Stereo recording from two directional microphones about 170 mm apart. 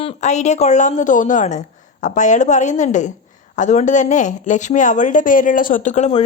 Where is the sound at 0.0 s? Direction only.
45° left (ahead or behind).